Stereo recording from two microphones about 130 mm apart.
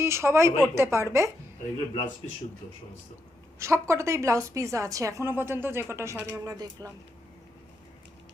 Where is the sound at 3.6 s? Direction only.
20° right (ahead or behind).